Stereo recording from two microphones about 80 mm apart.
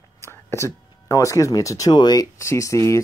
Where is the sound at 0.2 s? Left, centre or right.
Left.